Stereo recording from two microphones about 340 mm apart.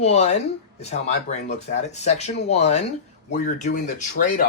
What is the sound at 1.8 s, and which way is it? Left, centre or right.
Speech, centre.